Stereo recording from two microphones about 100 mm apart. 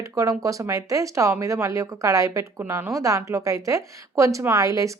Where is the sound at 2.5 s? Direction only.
20° right (ahead or behind).